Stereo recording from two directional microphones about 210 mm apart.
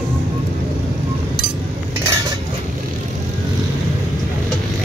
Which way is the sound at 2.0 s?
15° right (ahead or behind).